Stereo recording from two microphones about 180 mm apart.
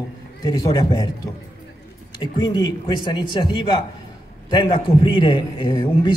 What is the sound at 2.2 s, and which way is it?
A man's voice, 25° left (ahead or behind).